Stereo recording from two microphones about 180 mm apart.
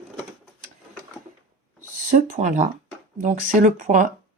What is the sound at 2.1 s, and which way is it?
Speech, 45° right (ahead or behind).